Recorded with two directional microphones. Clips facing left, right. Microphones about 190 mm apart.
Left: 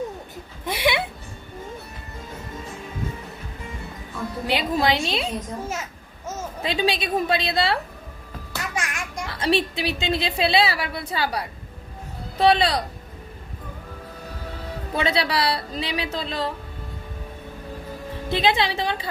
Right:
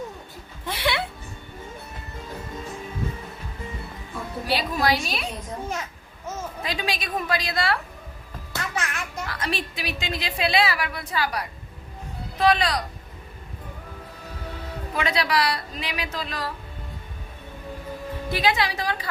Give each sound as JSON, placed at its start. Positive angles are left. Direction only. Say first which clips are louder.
{"t": 0.6, "sound": "a sound", "louder": "left 3 dB", "side_deg": 15}
{"t": 4.4, "sound": "a woman's voice", "louder": "left 2 dB", "side_deg": 20}
{"t": 6.6, "sound": "a woman's voice", "louder": "left 8 dB", "side_deg": 25}
{"t": 8.7, "sound": "a sound", "louder": "left 1 dB", "side_deg": 10}
{"t": 9.2, "sound": "a woman's voice", "louder": "left 9 dB", "side_deg": 30}
{"t": 14.9, "sound": "a woman's voice", "louder": "left 1 dB", "side_deg": 30}
{"t": 18.3, "sound": "a woman's voice", "louder": "left 2 dB", "side_deg": 25}